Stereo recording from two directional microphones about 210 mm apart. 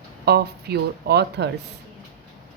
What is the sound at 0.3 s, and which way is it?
Speech, 50° right (ahead or behind).